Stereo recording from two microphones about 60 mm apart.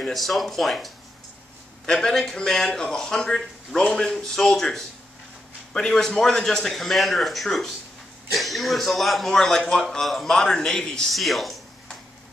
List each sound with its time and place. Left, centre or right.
0.0 s a man's voice: centre